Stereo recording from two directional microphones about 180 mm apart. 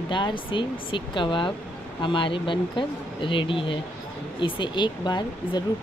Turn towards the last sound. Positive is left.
turn(degrees=25)  # may be behind; listen again after turning